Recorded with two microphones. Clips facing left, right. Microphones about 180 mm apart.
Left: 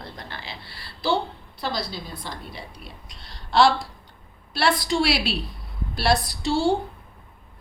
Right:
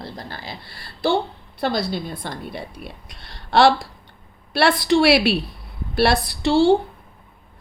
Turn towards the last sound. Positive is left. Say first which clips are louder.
# right 6 dB
turn(degrees=-70)  # may be behind; listen again after turning